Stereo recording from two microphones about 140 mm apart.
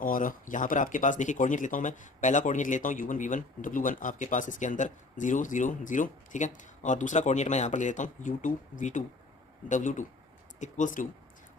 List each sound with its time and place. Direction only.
0.0 s speech: 75° left (ahead or behind)